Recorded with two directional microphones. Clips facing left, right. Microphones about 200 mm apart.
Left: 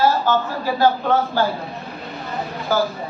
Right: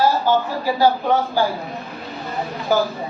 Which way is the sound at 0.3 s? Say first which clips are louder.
Right 1 dB; 15° right (ahead or behind).